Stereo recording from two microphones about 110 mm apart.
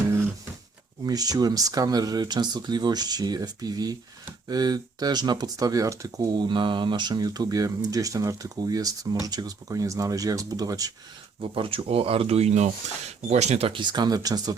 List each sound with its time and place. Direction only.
1.0 s speech: 35° right (ahead or behind)
11.3 s speech: 55° right (ahead or behind); by 13.7 s 80° right
13.7 s speech: 40° right (ahead or behind)